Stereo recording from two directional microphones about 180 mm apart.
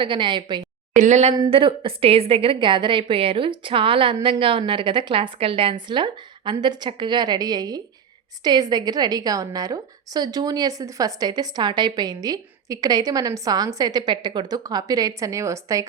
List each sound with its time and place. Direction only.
0.0 s a woman's voice: 25° right (ahead or behind)
0.9 s speech: 40° right (ahead or behind)
1.3 s a woman's voice: 25° right (ahead or behind)